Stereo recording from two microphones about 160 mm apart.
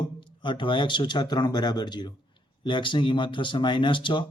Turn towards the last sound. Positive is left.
turn(degrees=30)  # may be behind; listen again after turning